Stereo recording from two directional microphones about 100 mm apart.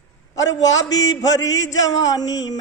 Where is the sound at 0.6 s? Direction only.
40° left (ahead or behind).